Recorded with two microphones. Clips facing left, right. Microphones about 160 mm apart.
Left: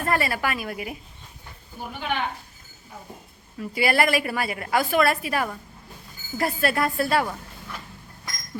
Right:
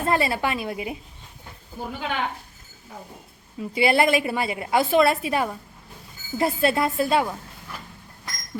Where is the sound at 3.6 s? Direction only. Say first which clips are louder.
Right 2 dB; 20° right (ahead or behind).